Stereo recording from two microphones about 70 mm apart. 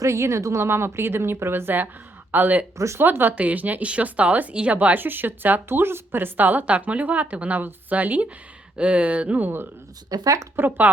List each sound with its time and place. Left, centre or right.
0.0 s speech: right
2.7 s speech: right
3.0 s speech: right
10.1 s speech: right
10.8 s speech: right